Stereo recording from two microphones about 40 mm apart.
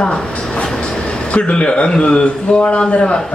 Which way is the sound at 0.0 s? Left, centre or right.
Left.